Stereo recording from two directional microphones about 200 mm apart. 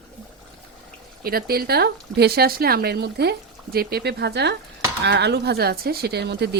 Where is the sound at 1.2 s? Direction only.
50° right (ahead or behind).